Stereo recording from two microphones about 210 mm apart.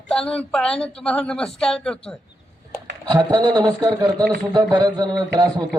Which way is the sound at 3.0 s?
20° right (ahead or behind).